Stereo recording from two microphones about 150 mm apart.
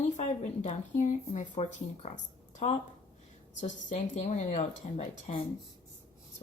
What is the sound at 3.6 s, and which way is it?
Speech, 55° left (ahead or behind).